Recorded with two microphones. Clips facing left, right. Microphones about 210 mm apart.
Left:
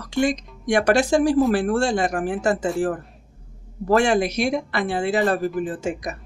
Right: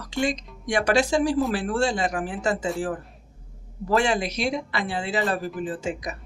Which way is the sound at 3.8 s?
50° left (ahead or behind).